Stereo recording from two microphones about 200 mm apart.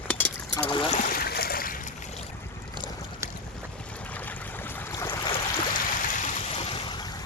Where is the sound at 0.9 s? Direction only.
50° left (ahead or behind).